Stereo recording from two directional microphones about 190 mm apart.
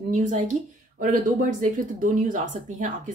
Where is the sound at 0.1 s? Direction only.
40° right (ahead or behind).